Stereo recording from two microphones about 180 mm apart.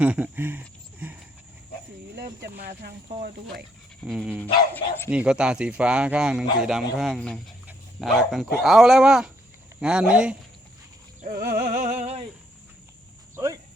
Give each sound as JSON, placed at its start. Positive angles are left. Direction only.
{"t": 0.0, "sound": "speech", "side_deg": -5}
{"t": 2.1, "sound": "speech", "side_deg": -60}
{"t": 4.0, "sound": "speech", "side_deg": -5}
{"t": 11.2, "sound": "music", "side_deg": -55}
{"t": 13.3, "sound": "speech", "side_deg": -20}